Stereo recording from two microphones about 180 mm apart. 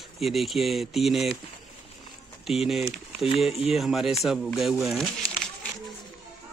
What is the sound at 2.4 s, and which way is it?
A man's voice, centre (ahead or behind).